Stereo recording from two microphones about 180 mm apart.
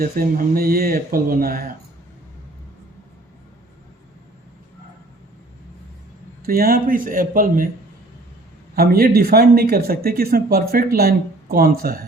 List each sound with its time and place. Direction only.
0.0 s speech: 55° right (ahead or behind)
6.4 s speech: 55° right (ahead or behind)
8.7 s speech: 55° right (ahead or behind)